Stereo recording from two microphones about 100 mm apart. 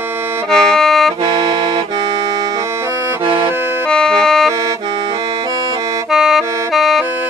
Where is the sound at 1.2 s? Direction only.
45° right (ahead or behind).